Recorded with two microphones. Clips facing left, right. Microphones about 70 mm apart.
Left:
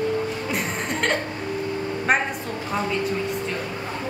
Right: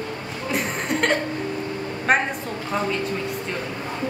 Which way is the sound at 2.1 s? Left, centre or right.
Centre.